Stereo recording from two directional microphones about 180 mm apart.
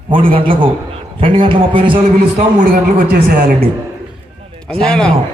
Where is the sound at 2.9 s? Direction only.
55° right (ahead or behind).